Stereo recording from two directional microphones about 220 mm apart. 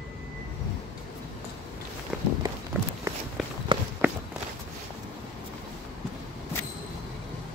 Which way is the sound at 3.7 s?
25° right (ahead or behind).